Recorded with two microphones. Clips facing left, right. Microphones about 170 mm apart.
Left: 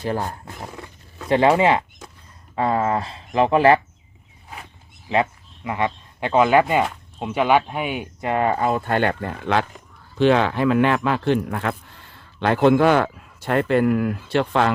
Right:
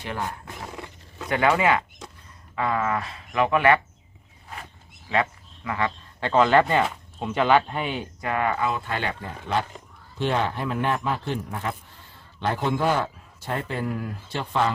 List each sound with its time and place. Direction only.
0.0 s speech: 35° left (ahead or behind)
5.0 s speech: 20° left (ahead or behind)
8.2 s speech: 25° left (ahead or behind)
8.6 s speech: 50° left (ahead or behind); by 9.6 s 75° left (ahead or behind)
10.2 s speech: 90° left; by 14.7 s 75° left (ahead or behind)